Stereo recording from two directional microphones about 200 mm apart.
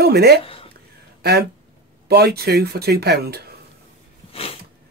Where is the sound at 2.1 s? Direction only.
55° right (ahead or behind).